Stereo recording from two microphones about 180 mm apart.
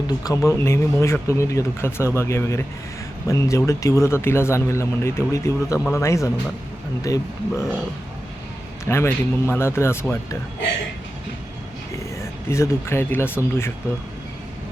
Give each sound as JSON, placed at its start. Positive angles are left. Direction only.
{"t": 0.1, "sound": "speech", "side_deg": 20}
{"t": 8.8, "sound": "speech", "side_deg": 15}
{"t": 12.5, "sound": "speech", "side_deg": 15}